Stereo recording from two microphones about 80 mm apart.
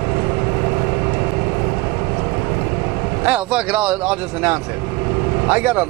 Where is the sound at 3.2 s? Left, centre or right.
Centre.